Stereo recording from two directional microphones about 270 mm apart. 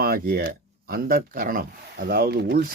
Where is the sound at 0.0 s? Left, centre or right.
Right.